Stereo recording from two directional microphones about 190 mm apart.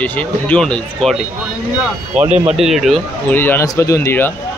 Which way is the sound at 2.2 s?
35° right (ahead or behind).